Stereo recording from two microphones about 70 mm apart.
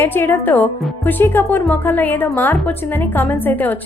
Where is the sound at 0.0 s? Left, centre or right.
Left.